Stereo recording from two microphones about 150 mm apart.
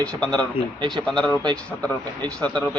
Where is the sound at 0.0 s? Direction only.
5° left (ahead or behind).